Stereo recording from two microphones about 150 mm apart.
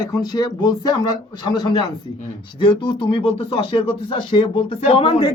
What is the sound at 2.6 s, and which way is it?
Speech, 35° left (ahead or behind).